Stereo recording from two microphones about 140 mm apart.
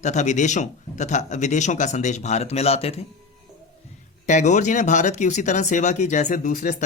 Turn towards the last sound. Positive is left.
turn(degrees=70)  # may be behind; listen again after turning